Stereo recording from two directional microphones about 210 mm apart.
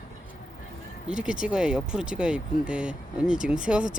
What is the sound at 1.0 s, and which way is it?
Speech, 5° right (ahead or behind).